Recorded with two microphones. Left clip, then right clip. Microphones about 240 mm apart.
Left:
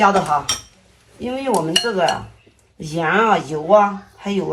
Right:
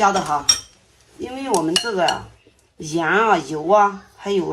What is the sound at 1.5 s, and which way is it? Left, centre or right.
Speech, right.